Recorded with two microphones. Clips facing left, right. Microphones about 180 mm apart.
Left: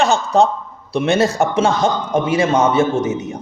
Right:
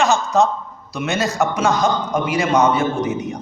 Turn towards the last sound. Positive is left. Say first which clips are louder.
# left 2 dB
turn(degrees=25)  # may be behind; listen again after turning